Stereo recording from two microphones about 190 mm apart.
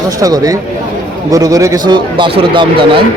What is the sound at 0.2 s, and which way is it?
Speech, 20° right (ahead or behind).